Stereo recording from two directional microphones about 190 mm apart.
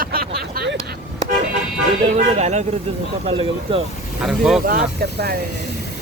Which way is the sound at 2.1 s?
35° right (ahead or behind).